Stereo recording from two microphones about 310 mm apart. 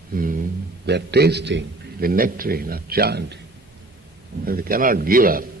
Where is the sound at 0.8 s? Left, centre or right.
Right.